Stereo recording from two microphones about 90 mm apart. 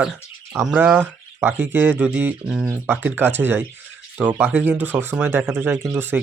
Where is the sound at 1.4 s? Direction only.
25° right (ahead or behind).